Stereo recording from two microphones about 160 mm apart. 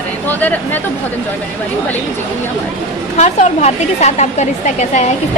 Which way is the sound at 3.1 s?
45° left (ahead or behind).